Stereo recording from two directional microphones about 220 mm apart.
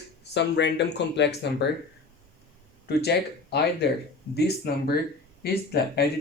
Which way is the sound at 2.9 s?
50° left (ahead or behind).